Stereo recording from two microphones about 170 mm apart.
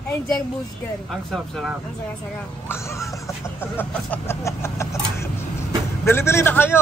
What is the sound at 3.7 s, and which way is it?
Speech, 15° left (ahead or behind).